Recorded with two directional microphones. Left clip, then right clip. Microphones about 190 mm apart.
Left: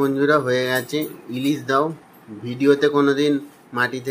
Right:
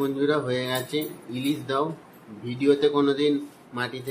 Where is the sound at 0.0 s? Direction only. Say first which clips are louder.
Left 7 dB; 25° left (ahead or behind).